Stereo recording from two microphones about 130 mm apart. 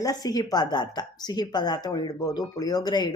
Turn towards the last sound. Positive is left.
turn(degrees=35)  # may be behind; listen again after turning